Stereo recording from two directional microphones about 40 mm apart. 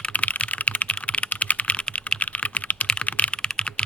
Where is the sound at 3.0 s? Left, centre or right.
Left.